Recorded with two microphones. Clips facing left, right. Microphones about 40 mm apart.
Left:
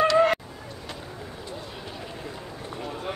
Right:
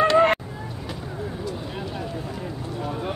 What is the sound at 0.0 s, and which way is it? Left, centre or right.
Vehicle, right.